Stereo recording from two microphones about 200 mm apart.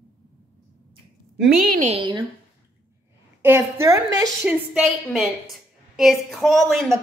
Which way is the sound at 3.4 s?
10° right (ahead or behind).